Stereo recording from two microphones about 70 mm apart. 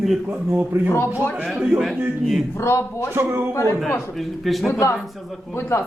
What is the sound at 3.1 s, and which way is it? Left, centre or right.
Speech, right.